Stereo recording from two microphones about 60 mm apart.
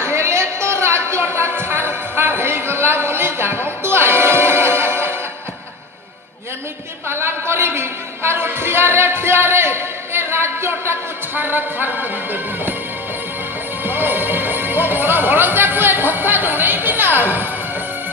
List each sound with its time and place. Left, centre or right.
0.0 s music: right
7.1 s a woman's voice: right
13.8 s speech: right